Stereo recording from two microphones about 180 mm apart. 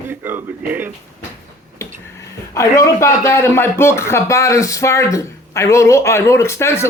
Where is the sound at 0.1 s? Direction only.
10° right (ahead or behind).